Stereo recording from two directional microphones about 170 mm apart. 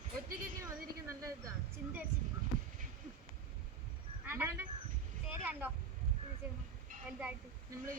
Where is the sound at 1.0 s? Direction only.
20° right (ahead or behind).